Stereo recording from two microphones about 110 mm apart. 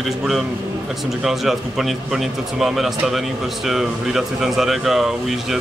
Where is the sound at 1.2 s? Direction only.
5° right (ahead or behind).